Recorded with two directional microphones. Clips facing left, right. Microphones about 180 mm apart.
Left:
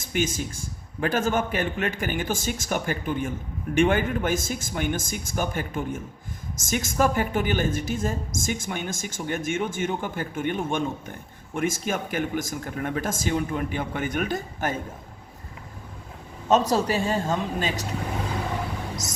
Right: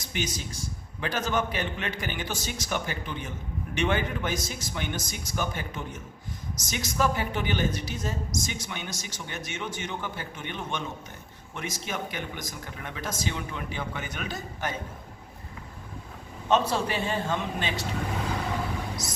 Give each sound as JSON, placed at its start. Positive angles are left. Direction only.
{"t": 0.1, "sound": "a woman's voice", "side_deg": 50}
{"t": 16.5, "sound": "a man's voice", "side_deg": 40}